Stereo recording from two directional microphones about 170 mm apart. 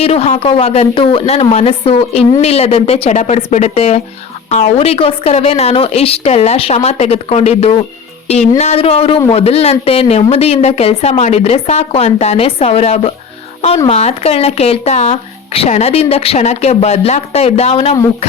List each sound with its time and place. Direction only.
0.0 s a man's voice: 35° left (ahead or behind)